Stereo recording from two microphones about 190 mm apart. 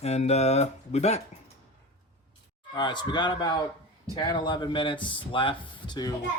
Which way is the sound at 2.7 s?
25° left (ahead or behind).